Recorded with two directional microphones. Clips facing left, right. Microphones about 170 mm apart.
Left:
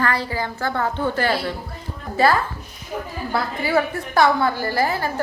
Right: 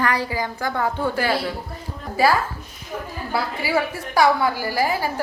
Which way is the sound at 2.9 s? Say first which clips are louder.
Left 2 dB; 20° left (ahead or behind).